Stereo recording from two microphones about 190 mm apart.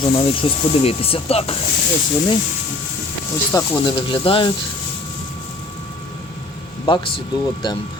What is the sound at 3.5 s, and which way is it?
Speech, 25° left (ahead or behind).